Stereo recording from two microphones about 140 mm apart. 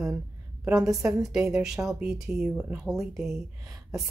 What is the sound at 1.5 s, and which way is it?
Speech, 5° right (ahead or behind).